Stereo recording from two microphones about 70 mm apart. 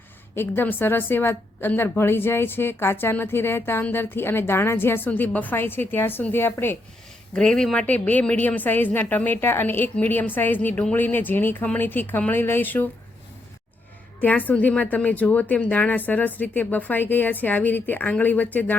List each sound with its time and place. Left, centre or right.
0.3 s a woman's voice: left
7.3 s speech: centre
7.9 s a woman's voice: left
14.2 s a woman's voice: left